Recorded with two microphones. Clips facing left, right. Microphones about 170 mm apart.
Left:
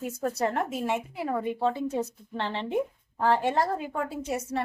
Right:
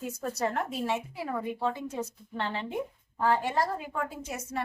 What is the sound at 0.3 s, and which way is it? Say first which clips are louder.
A woman's voice: left 1 dB; 20° left (ahead or behind).